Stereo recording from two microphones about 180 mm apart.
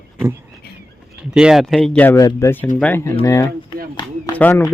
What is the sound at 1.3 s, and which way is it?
Speech, 5° right (ahead or behind).